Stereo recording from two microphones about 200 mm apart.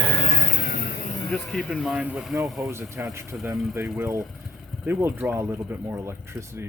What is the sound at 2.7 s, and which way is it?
Speech, 15° right (ahead or behind).